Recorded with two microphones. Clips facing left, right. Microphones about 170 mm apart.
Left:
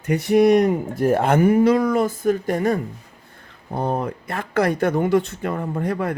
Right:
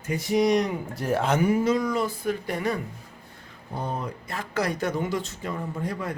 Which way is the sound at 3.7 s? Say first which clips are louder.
Left 8 dB; 55° left (ahead or behind).